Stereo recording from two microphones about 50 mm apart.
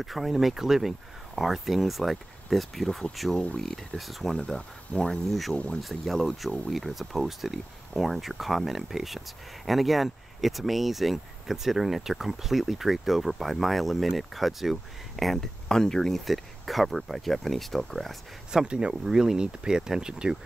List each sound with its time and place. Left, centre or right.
0.0 s speech: centre
4.9 s speech: centre
5.8 s speech: centre
18.7 s speech: centre